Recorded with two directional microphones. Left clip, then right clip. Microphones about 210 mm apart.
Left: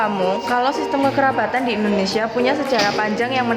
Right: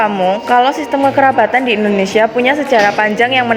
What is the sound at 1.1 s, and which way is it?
A woman's voice, 25° right (ahead or behind).